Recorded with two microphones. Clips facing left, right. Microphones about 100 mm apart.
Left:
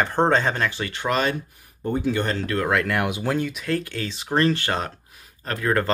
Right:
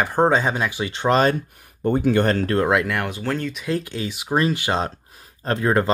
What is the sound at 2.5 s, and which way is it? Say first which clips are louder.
Speech: right 1 dB; 20° right (ahead or behind).